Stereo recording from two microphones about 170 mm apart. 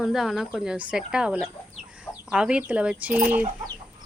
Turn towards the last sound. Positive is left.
turn(degrees=-10)  # may be behind; listen again after turning